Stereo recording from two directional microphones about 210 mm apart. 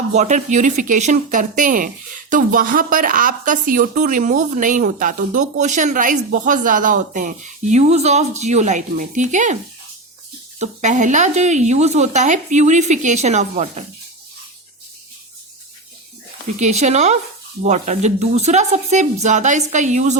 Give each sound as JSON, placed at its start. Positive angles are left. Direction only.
{"t": 0.1, "sound": "speech", "side_deg": -35}
{"t": 10.6, "sound": "speech", "side_deg": -35}
{"t": 16.6, "sound": "speech", "side_deg": -35}